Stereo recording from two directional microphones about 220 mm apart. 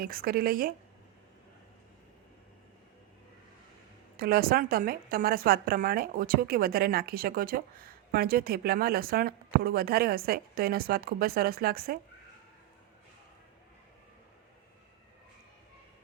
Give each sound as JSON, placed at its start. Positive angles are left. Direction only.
{"t": 0.0, "sound": "a woman's voice", "side_deg": -40}
{"t": 4.2, "sound": "a woman's voice", "side_deg": -45}